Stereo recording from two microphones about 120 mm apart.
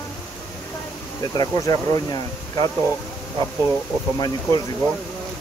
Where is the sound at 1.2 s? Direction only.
30° left (ahead or behind).